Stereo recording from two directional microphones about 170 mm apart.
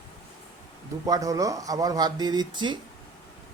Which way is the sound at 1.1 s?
20° right (ahead or behind).